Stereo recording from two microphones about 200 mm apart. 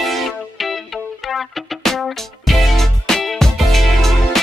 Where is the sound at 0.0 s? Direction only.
Centre (ahead or behind).